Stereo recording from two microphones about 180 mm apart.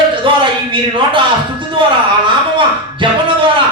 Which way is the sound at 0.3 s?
30° right (ahead or behind).